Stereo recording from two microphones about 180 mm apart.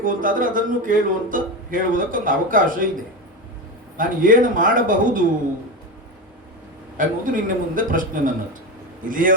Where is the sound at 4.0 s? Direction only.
50° right (ahead or behind).